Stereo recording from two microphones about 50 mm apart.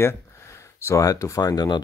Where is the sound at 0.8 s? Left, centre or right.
Left.